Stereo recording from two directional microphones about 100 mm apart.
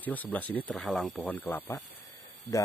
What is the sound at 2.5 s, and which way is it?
Speech, 35° left (ahead or behind).